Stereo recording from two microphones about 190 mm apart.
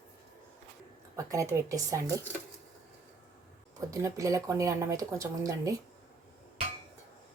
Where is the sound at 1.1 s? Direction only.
15° right (ahead or behind).